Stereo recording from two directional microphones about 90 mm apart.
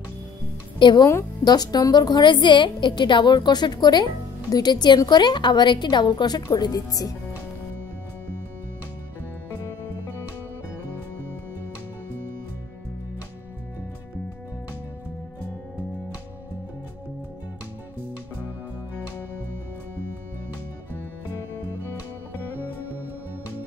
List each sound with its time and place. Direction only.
0.9 s a woman's voice: 40° left (ahead or behind)